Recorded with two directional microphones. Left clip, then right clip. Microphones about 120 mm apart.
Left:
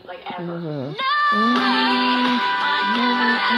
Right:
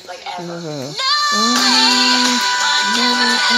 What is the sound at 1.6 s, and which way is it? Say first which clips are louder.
Music: right 6 dB; 50° left (ahead or behind).